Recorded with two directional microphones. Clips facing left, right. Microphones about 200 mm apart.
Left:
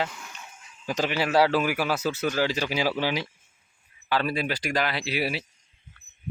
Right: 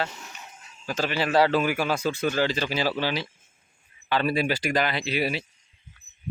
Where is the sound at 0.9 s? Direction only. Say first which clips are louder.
Even; 15° left (ahead or behind).